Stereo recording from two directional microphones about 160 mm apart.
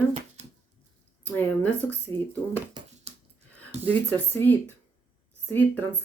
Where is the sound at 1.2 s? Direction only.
10° left (ahead or behind).